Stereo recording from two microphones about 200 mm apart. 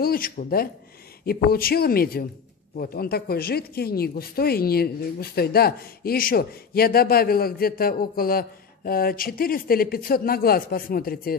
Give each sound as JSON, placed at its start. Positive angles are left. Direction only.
{"t": 0.0, "sound": "speech", "side_deg": 45}